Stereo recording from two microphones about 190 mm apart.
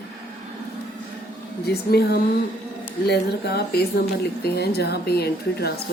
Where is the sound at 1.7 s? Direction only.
55° left (ahead or behind).